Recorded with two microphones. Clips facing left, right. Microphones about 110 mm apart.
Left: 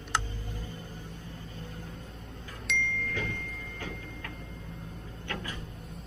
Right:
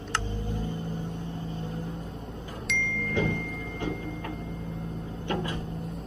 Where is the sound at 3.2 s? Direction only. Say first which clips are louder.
Right 8 dB; 20° right (ahead or behind).